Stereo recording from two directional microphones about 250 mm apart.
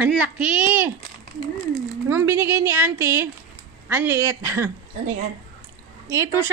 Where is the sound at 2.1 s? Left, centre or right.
Centre.